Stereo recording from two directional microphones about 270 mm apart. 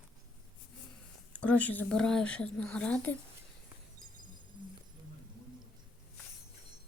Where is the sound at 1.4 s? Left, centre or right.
Centre.